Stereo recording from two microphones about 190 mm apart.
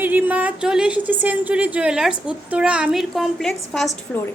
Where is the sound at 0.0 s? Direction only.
10° right (ahead or behind).